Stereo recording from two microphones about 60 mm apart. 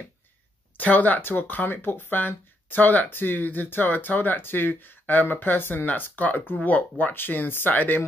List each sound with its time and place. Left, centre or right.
0.7 s speech: left